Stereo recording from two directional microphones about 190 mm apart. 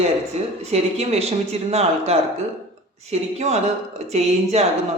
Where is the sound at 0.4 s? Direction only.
35° right (ahead or behind).